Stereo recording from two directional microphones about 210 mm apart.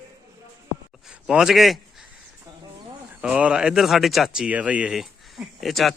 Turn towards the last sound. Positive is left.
turn(degrees=0)  # may be behind; listen again after turning